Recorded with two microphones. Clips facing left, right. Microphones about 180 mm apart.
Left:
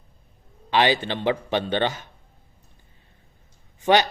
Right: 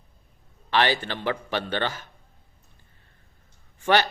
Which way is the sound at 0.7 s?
15° left (ahead or behind).